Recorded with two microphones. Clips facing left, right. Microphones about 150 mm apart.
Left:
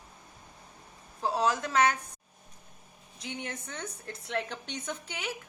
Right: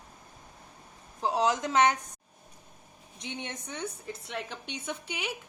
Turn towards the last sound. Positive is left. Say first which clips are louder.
# right 1 dB
turn(degrees=-15)  # may be behind; listen again after turning